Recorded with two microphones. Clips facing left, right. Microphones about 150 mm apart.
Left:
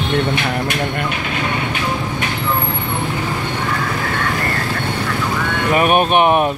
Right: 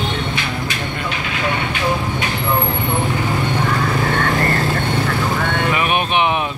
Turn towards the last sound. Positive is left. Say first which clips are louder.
# left 5 dB
turn(degrees=50)  # may be behind; listen again after turning